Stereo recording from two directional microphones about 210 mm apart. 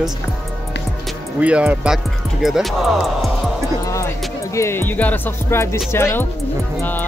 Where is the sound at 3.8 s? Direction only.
15° left (ahead or behind).